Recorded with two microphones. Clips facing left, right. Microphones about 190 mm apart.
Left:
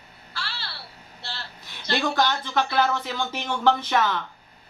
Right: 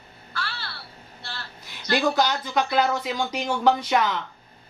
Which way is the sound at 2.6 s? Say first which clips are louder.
Right 1 dB; 15° right (ahead or behind).